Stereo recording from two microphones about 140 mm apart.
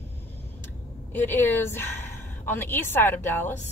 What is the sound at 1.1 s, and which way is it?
Speech, 15° left (ahead or behind).